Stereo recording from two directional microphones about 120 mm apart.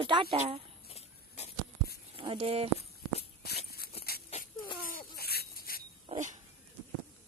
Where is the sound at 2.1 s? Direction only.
50° right (ahead or behind).